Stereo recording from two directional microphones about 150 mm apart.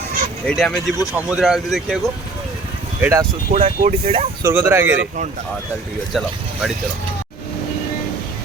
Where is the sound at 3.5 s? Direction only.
50° right (ahead or behind).